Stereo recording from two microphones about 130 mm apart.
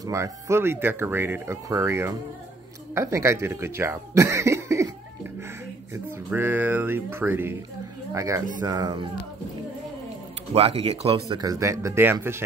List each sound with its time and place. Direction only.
0.0 s speech: 20° right (ahead or behind)
10.5 s speech: 50° right (ahead or behind)
11.2 s speech: 30° right (ahead or behind)